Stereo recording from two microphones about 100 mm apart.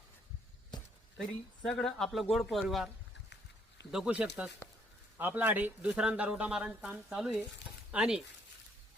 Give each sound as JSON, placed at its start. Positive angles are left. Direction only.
{"t": 0.7, "sound": "a sound", "side_deg": 45}
{"t": 1.6, "sound": "speech", "side_deg": 5}
{"t": 3.9, "sound": "a man's voice", "side_deg": -5}